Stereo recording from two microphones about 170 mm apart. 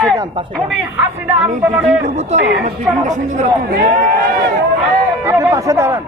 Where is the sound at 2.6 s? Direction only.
45° right (ahead or behind).